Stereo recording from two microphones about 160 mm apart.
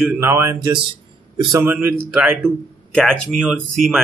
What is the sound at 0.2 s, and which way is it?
A man's voice, 15° right (ahead or behind).